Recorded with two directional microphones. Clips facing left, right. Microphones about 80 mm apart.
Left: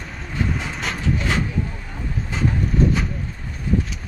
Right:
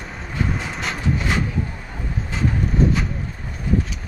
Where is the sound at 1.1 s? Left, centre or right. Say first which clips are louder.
Even; centre.